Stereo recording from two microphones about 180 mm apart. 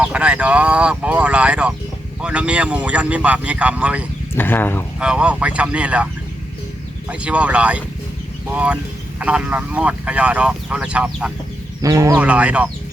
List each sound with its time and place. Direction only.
0.0 s speech: 5° right (ahead or behind)
4.4 s speech: 10° left (ahead or behind)
4.9 s speech: 5° right (ahead or behind)
7.1 s speech: 5° right (ahead or behind)
11.8 s speech: 20° right (ahead or behind)